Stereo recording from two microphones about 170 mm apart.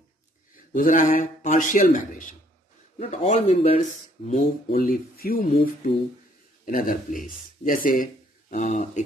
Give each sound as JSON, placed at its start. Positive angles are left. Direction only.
{"t": 0.7, "sound": "a man's voice", "side_deg": 50}
{"t": 4.7, "sound": "a man's voice", "side_deg": 60}